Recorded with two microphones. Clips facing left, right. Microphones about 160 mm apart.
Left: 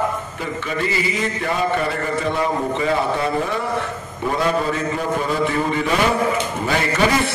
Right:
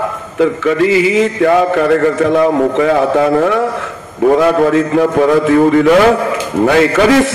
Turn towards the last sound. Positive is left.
turn(degrees=-90)